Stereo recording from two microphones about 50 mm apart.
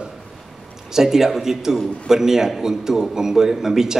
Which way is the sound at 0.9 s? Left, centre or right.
Centre.